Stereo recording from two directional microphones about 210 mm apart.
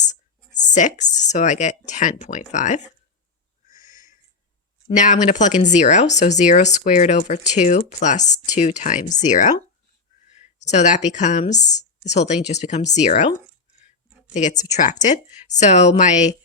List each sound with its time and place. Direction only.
0.0 s speech: 35° left (ahead or behind)
4.9 s speech: 35° left (ahead or behind)